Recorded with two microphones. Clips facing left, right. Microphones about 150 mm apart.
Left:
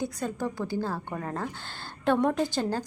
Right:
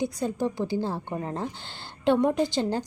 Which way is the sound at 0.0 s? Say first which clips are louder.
Right 4 dB; 20° right (ahead or behind).